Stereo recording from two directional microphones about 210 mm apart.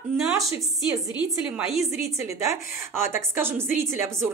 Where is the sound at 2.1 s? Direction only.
15° right (ahead or behind).